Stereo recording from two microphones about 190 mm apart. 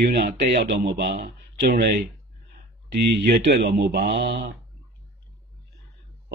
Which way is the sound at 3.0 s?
55° right (ahead or behind).